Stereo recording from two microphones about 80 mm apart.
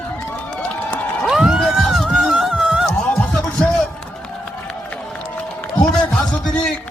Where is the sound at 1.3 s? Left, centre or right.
Centre.